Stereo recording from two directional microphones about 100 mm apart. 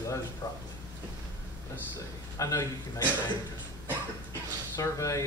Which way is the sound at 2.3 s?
35° left (ahead or behind).